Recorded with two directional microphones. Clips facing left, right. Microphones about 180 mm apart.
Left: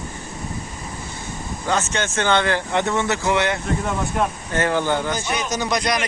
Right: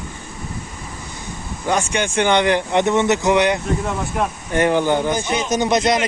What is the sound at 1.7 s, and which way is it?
A man's voice, 15° right (ahead or behind).